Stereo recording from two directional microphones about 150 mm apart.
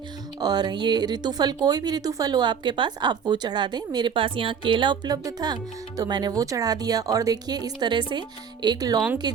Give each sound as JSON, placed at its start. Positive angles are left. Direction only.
{"t": 0.3, "sound": "speech", "side_deg": -30}